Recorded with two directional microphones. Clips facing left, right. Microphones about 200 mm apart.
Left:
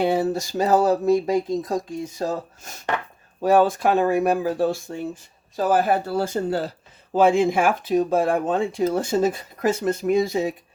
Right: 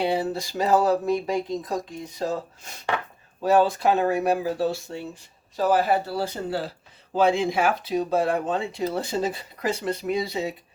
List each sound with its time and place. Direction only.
0.0 s speech: 45° left (ahead or behind)
3.4 s speech: 50° left (ahead or behind)